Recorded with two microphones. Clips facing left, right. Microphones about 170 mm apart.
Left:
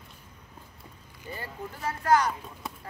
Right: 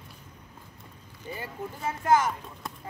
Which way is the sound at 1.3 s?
15° right (ahead or behind).